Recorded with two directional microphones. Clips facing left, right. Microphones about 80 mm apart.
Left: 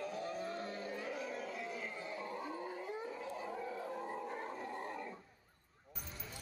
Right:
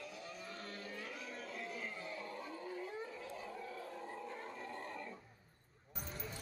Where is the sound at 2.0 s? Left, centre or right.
Left.